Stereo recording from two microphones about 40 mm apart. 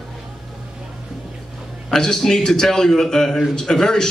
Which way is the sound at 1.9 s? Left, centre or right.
Centre.